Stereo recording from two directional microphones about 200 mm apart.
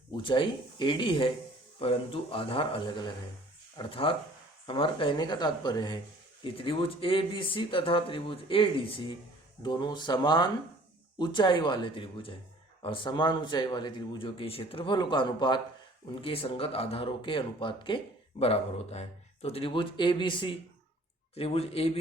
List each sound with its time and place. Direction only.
0.2 s speech: 25° left (ahead or behind)